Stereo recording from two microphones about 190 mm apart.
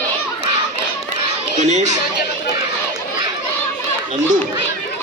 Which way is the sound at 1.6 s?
40° right (ahead or behind).